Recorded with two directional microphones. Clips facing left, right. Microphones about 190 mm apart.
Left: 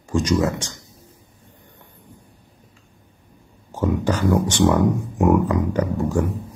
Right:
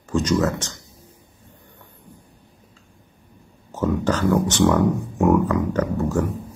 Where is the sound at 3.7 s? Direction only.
10° left (ahead or behind).